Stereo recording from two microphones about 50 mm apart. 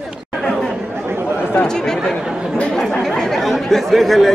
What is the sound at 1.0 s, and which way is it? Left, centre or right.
Chatter, right.